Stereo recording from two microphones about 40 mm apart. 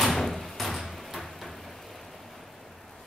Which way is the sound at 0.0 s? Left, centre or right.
Centre.